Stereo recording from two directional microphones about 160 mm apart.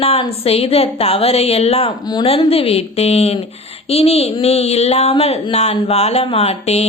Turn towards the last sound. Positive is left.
turn(degrees=40)  # may be behind; listen again after turning